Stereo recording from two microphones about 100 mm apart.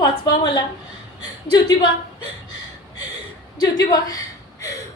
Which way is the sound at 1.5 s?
45° left (ahead or behind).